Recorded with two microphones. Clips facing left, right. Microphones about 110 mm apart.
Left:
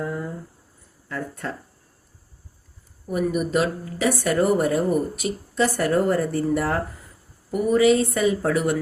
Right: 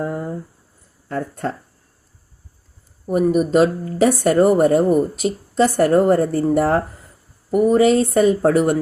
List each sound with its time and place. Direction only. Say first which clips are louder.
0.0 s a sound: right 4 dB; 50° right (ahead or behind)
1.0 s speech: right 6 dB; 45° right (ahead or behind)
3.1 s speech: right 7 dB; 35° right (ahead or behind)